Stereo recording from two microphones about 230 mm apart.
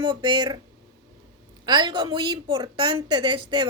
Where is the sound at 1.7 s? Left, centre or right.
Centre.